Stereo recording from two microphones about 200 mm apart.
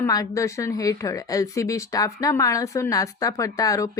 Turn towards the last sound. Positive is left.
turn(degrees=15)  # may be behind; listen again after turning